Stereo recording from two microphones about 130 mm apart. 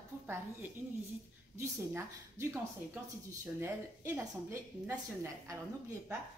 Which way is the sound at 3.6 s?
20° right (ahead or behind).